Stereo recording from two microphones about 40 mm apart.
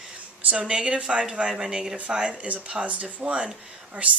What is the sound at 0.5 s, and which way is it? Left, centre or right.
Speech, right.